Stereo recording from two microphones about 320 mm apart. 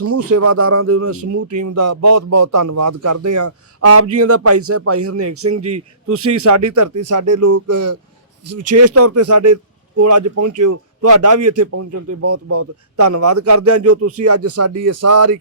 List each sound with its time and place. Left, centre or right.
0.4 s a man's voice: right
1.3 s a man's voice: right
6.4 s a man's voice: right
11.0 s a man's voice: right